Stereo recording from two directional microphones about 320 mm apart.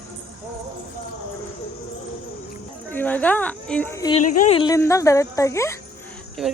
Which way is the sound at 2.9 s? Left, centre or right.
Centre.